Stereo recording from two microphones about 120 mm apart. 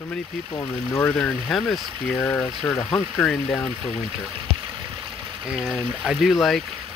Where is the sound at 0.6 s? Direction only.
25° left (ahead or behind).